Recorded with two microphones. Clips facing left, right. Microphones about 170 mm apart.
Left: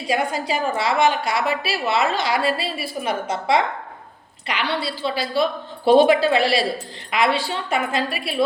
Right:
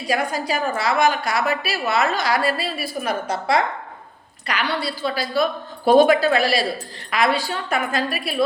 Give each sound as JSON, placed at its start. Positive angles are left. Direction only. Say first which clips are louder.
{"t": 0.1, "sound": "a woman's voice", "louder": "even", "side_deg": 25}